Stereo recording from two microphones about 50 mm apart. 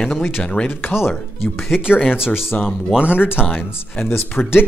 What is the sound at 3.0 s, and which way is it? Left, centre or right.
Speech, right.